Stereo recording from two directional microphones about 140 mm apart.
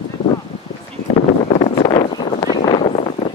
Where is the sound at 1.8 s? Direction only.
30° left (ahead or behind).